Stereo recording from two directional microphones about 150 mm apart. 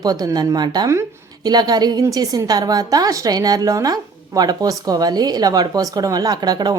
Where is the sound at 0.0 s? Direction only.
25° right (ahead or behind).